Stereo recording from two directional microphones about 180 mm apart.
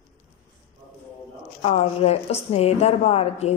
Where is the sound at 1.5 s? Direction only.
30° left (ahead or behind).